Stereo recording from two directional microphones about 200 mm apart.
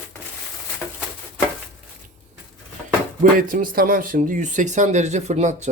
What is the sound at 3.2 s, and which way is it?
Speech, 45° right (ahead or behind).